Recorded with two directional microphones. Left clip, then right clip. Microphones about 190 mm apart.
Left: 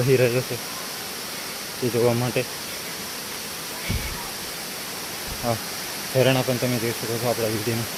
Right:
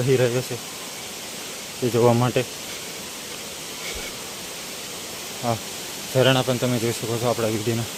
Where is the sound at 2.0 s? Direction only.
35° right (ahead or behind).